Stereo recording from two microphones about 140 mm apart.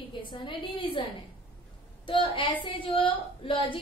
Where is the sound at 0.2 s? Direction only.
35° left (ahead or behind).